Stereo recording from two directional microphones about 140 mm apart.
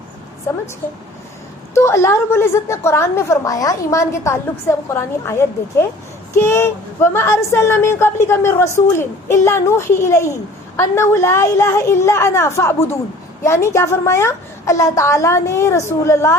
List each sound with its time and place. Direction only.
0.5 s a woman's voice: 20° left (ahead or behind)
1.7 s a woman's voice: 20° left (ahead or behind)